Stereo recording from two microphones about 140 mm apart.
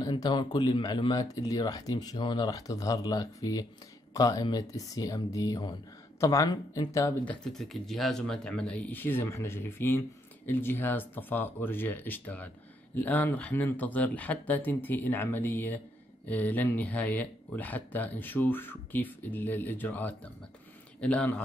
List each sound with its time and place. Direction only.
0.0 s speech: 30° left (ahead or behind)
7.2 s speech: 5° left (ahead or behind)